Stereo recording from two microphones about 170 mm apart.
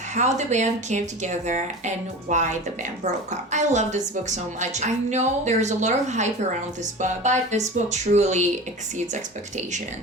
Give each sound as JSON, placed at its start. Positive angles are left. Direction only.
{"t": 0.2, "sound": "a woman's voice", "side_deg": -45}